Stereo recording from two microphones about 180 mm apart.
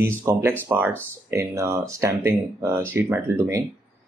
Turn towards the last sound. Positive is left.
turn(degrees=-15)  # may be behind; listen again after turning